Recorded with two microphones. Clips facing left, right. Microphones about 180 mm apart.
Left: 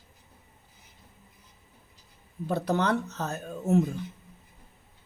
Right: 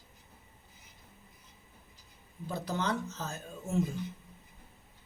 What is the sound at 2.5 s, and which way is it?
Speech, 65° left (ahead or behind).